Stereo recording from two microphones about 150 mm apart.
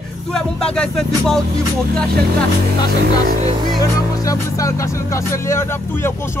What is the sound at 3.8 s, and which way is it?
Speech, 20° left (ahead or behind).